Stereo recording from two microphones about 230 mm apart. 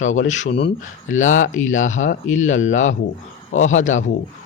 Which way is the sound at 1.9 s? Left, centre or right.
Left.